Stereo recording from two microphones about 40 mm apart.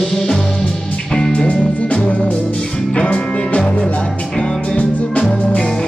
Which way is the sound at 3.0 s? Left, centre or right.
Left.